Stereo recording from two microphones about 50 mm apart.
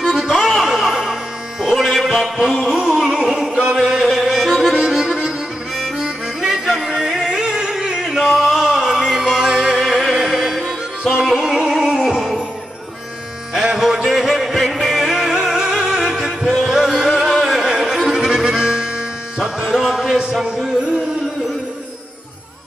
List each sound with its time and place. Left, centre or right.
0.0 s music: centre
1.8 s music: centre
6.4 s music: centre
9.8 s music: centre
13.5 s music: centre
19.4 s speech: centre